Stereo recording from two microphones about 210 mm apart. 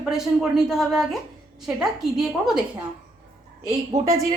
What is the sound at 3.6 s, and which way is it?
Speech, 15° right (ahead or behind).